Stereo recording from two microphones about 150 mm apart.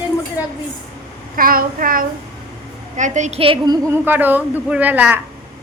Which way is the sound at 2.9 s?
55° right (ahead or behind).